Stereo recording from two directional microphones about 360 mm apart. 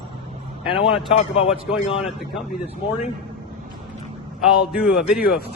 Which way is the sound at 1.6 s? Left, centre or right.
Centre.